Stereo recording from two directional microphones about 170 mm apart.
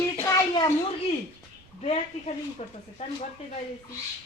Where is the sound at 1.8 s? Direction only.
40° left (ahead or behind).